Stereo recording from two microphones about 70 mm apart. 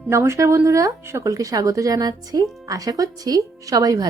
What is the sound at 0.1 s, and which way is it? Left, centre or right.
Speech, right.